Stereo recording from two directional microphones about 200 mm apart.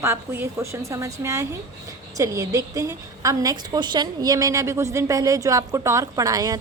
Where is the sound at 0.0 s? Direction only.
15° right (ahead or behind).